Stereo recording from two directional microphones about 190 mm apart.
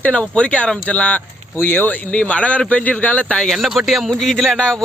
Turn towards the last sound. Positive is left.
turn(degrees=5)  # may be behind; listen again after turning